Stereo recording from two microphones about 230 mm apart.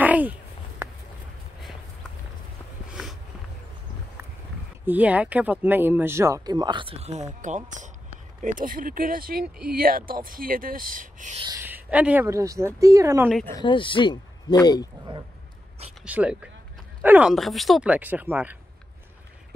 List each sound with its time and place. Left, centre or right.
0.0 s a sound: centre
4.8 s speech: centre; by 11.4 s right
11.4 s speech: centre
13.6 s speech: left
16.0 s speech: centre